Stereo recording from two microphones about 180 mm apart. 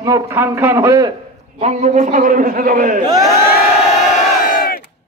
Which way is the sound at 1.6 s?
40° right (ahead or behind).